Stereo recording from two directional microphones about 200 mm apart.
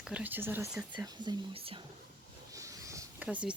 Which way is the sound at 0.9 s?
20° right (ahead or behind).